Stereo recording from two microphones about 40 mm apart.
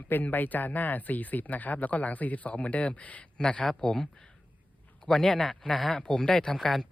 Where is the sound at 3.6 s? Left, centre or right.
Centre.